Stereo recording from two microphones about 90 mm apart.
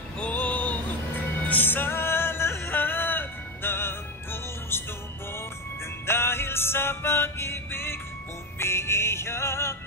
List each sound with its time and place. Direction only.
0.2 s music: 20° left (ahead or behind)
6.0 s music: 25° left (ahead or behind)